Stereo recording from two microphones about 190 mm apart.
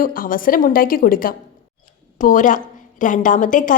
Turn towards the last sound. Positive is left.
turn(degrees=45)  # may be behind; listen again after turning